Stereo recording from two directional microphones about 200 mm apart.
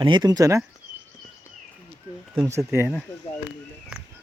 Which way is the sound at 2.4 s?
15° right (ahead or behind).